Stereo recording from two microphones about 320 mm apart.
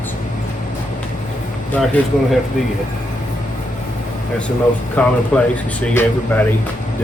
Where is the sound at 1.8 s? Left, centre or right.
Centre.